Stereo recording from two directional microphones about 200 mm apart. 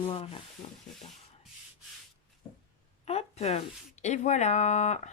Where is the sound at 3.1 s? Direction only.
30° left (ahead or behind).